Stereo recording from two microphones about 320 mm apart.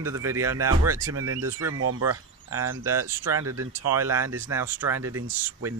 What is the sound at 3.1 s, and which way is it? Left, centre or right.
Speech, centre.